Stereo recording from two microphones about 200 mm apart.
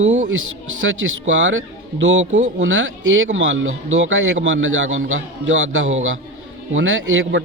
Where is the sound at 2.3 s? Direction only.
40° right (ahead or behind).